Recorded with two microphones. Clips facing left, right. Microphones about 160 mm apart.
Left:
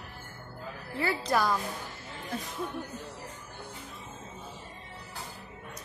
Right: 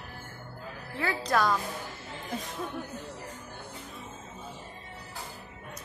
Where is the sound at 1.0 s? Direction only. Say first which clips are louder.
Even; 5° left (ahead or behind).